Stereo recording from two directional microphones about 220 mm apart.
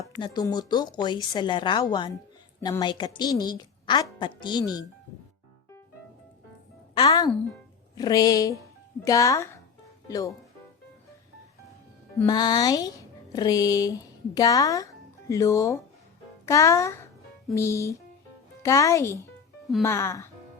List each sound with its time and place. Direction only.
0.0 s speech: 15° left (ahead or behind)
6.9 s speech: 15° left (ahead or behind)
12.2 s speech: 20° left (ahead or behind)